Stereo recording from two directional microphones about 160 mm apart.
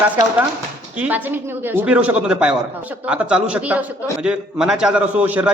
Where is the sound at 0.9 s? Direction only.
10° right (ahead or behind).